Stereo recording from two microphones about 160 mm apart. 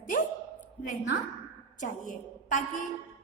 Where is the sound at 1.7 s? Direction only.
55° left (ahead or behind).